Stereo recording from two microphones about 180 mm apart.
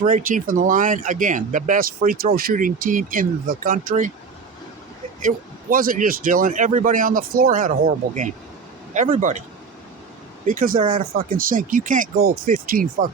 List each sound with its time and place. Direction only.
0.0 s speech: 50° right (ahead or behind)
5.7 s speech: 50° right (ahead or behind)
10.4 s speech: 50° right (ahead or behind)